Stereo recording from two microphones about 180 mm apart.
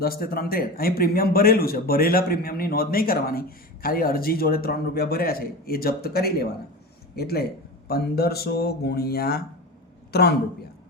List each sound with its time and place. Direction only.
0.0 s a man's voice: 55° left (ahead or behind)